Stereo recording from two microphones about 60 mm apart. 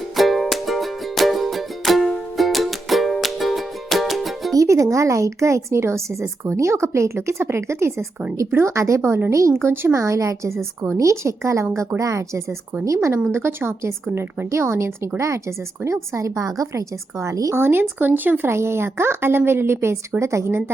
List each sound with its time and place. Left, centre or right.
0.2 s music: centre
4.5 s speech: right
8.7 s a woman's voice: right
9.3 s speech: right
9.6 s a woman's voice: right
9.9 s speech: right
13.3 s a woman's voice: right
17.5 s speech: right
18.5 s a woman's voice: right